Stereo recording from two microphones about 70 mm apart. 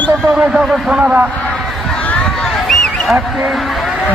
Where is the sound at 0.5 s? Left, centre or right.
Centre.